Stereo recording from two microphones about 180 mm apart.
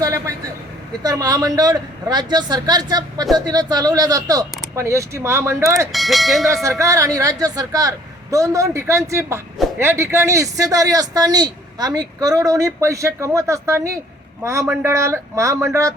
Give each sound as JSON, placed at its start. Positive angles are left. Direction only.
{"t": 0.0, "sound": "vehicle", "side_deg": -20}
{"t": 1.0, "sound": "a man's voice", "side_deg": -20}
{"t": 5.9, "sound": "speech", "side_deg": 0}
{"t": 6.5, "sound": "a man's voice", "side_deg": -15}